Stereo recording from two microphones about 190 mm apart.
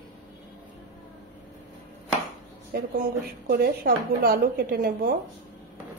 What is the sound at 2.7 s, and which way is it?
A woman's voice, 55° right (ahead or behind).